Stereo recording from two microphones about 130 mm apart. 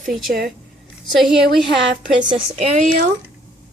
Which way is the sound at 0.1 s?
Centre (ahead or behind).